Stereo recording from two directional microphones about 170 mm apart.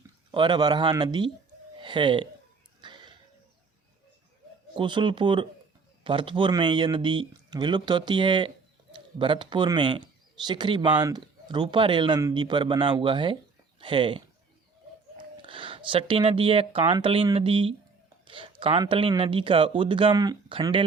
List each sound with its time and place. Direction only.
0.3 s speech: 25° right (ahead or behind)
2.8 s a sound: 25° right (ahead or behind)
4.7 s speech: 30° right (ahead or behind)
15.2 s speech: 30° right (ahead or behind)